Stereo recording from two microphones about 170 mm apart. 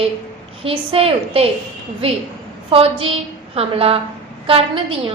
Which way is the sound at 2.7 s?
35° right (ahead or behind).